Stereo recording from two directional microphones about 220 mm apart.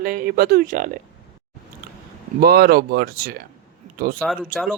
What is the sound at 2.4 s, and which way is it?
Speech, 45° right (ahead or behind).